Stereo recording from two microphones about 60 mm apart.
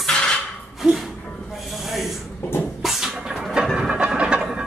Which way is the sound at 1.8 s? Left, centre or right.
Centre.